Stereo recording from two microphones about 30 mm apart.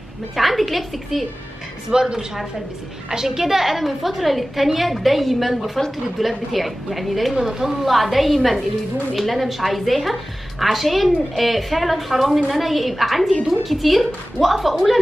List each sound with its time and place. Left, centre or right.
0.4 s a woman's voice: centre
1.9 s speech: right
3.1 s a woman's voice: centre
7.4 s a woman's voice: centre